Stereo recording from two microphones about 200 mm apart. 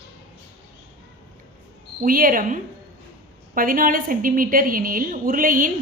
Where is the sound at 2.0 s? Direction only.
45° right (ahead or behind).